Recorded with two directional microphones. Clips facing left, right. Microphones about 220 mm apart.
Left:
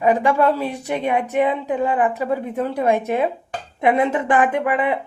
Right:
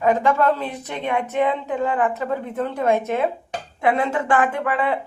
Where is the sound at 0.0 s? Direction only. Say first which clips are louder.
Left 2 dB; 15° left (ahead or behind).